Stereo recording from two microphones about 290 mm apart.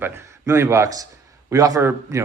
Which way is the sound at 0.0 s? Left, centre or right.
Centre.